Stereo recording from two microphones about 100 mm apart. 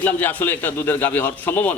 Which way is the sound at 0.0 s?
20° left (ahead or behind).